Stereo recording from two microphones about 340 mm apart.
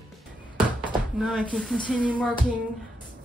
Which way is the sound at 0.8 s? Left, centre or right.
Centre.